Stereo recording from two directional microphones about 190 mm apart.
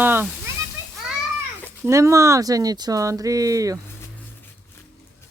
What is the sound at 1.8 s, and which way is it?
Speech, 15° right (ahead or behind).